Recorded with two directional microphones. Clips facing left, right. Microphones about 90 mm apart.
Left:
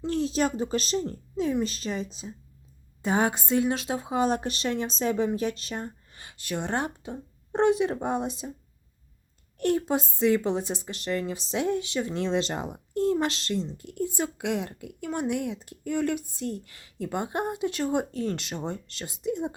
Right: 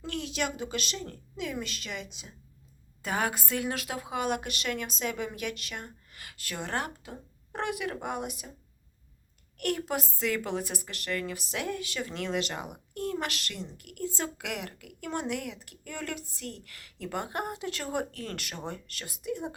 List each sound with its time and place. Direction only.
0.0 s speech: 30° left (ahead or behind)
3.0 s a woman's voice: 25° left (ahead or behind)
9.6 s a woman's voice: 25° left (ahead or behind)